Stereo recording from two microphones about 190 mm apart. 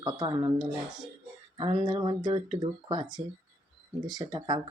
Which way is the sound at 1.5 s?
25° right (ahead or behind).